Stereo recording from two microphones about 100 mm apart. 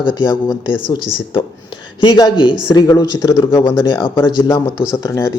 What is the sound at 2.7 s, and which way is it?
Speech, 40° left (ahead or behind).